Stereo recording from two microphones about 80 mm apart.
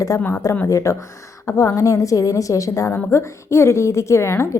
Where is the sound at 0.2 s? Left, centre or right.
Left.